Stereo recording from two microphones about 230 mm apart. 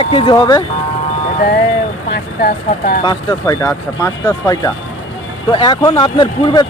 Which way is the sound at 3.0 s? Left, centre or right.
Centre.